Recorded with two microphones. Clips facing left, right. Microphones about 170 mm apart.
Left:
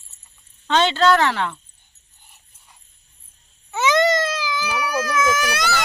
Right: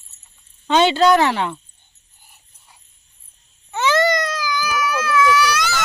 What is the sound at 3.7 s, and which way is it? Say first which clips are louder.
Baby cry: even; 10° left (ahead or behind).